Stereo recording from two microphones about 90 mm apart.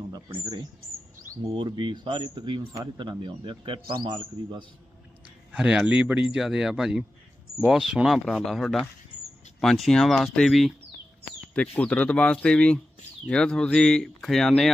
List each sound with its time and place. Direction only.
0.3 s speech: 50° right (ahead or behind)
1.5 s speech: 60° right (ahead or behind)
5.5 s speech: 10° right (ahead or behind)
11.5 s speech: 15° left (ahead or behind)